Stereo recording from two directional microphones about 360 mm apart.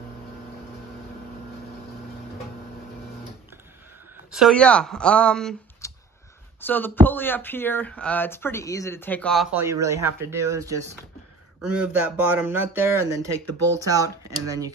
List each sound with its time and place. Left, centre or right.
4.3 s speech: centre